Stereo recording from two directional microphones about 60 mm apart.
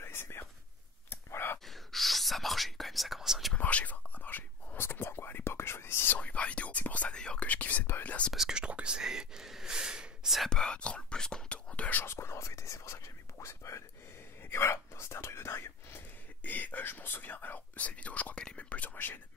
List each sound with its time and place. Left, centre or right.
0.0 s whispering: left
1.1 s clicking: left
1.7 s whispering: centre
3.5 s whispering: left
6.1 s whispering: left
8.3 s whispering: centre
10.5 s whispering: centre
12.0 s whispering: left
16.4 s whispering: left